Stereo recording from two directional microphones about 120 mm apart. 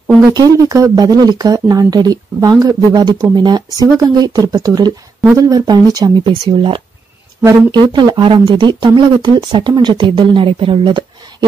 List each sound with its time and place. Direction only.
0.3 s speech: 30° right (ahead or behind)
7.4 s speech: 40° right (ahead or behind)